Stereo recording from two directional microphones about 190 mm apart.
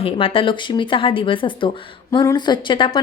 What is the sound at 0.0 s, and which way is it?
A woman's voice, 30° left (ahead or behind).